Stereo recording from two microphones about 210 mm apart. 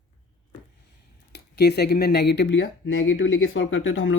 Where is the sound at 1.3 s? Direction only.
50° left (ahead or behind).